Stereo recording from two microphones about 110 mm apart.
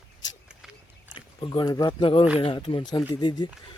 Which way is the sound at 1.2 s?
45° left (ahead or behind).